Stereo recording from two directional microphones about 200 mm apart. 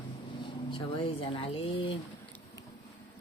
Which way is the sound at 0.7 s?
25° left (ahead or behind).